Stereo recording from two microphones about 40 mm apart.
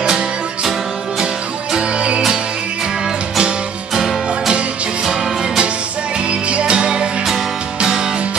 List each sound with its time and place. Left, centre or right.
1.2 s music: right
3.9 s music: centre
6.6 s music: right